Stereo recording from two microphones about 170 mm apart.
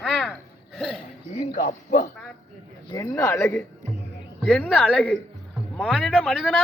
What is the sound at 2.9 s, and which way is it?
Speech, 20° left (ahead or behind).